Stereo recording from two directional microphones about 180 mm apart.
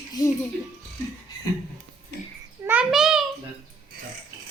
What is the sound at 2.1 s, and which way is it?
Babbling, 70° left (ahead or behind).